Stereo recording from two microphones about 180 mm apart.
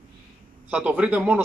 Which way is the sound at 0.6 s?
10° right (ahead or behind).